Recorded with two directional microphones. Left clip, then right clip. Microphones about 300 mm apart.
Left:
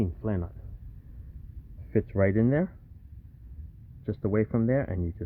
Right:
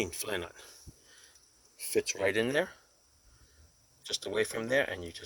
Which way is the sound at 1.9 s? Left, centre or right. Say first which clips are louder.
Left 3 dB; centre.